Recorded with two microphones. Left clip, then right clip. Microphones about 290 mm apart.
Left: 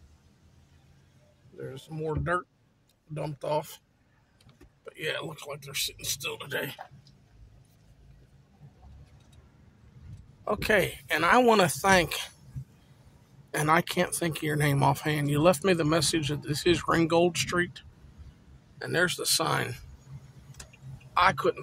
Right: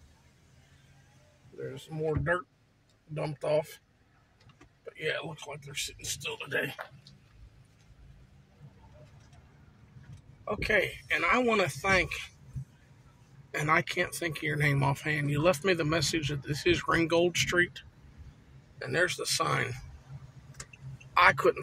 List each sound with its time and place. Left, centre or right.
1.6 s speech: centre
4.9 s speech: centre
10.4 s speech: left
13.5 s speech: centre
21.1 s a man's voice: centre